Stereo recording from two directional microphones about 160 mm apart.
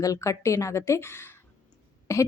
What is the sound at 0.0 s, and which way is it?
A woman's voice, 20° left (ahead or behind).